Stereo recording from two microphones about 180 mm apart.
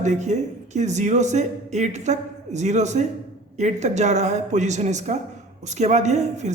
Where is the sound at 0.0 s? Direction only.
40° right (ahead or behind).